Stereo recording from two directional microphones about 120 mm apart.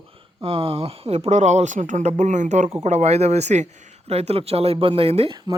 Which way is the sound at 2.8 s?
65° right (ahead or behind).